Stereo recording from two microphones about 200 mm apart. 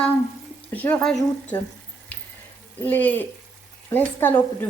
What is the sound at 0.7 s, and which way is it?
Speech, 10° left (ahead or behind).